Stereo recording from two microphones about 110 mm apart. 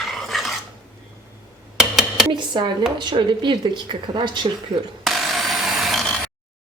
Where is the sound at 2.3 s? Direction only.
45° right (ahead or behind).